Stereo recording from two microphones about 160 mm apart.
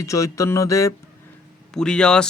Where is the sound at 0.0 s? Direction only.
20° left (ahead or behind).